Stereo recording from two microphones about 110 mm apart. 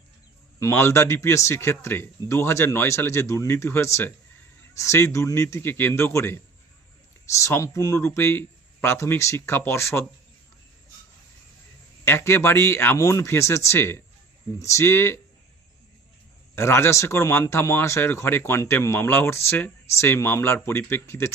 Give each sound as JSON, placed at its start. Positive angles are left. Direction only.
{"t": 0.6, "sound": "speech", "side_deg": 25}
{"t": 12.0, "sound": "speech", "side_deg": 25}
{"t": 16.6, "sound": "speech", "side_deg": 25}